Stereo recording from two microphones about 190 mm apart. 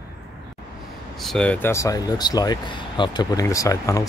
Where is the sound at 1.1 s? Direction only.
Centre (ahead or behind).